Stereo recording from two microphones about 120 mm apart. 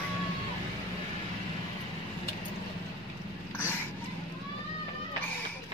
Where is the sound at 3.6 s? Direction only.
15° left (ahead or behind).